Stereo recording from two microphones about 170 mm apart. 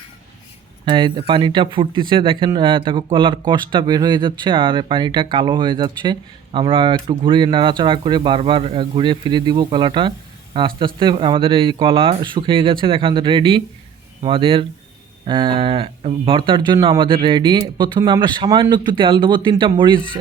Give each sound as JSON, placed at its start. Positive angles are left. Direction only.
{"t": 0.9, "sound": "speech", "side_deg": -30}